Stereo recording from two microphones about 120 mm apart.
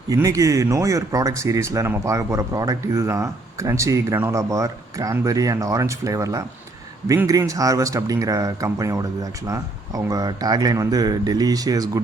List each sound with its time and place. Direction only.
0.1 s speech: 30° right (ahead or behind)